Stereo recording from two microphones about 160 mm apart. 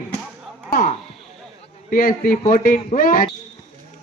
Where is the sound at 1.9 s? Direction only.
60° left (ahead or behind).